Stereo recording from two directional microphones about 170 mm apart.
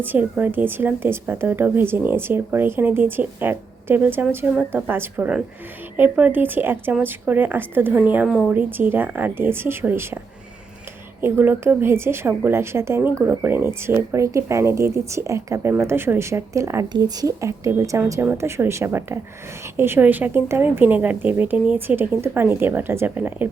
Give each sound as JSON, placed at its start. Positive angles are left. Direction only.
{"t": 0.0, "sound": "a woman's voice", "side_deg": -10}
{"t": 11.2, "sound": "a woman's voice", "side_deg": -15}